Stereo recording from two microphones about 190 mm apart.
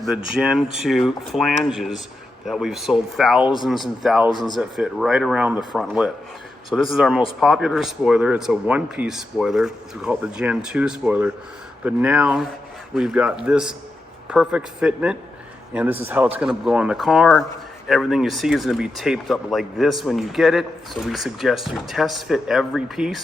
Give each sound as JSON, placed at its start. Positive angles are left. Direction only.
{"t": 0.3, "sound": "speech", "side_deg": -5}
{"t": 4.3, "sound": "speech", "side_deg": 25}
{"t": 4.5, "sound": "speech", "side_deg": -5}